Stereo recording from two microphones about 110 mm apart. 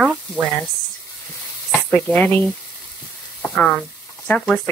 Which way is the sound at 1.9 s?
15° left (ahead or behind).